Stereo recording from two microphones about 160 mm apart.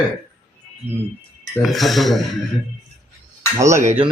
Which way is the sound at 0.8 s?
35° left (ahead or behind).